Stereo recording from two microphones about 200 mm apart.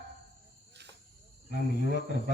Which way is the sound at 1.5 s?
60° left (ahead or behind).